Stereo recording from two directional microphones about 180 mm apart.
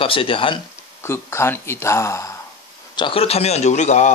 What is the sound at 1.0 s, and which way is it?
Speech, 15° left (ahead or behind).